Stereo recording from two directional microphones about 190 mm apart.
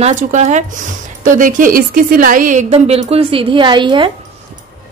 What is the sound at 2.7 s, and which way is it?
A woman's voice, 35° right (ahead or behind).